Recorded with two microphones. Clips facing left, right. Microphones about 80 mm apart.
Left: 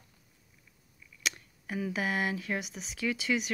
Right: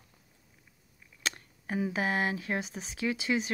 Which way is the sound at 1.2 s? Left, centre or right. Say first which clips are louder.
Even; right.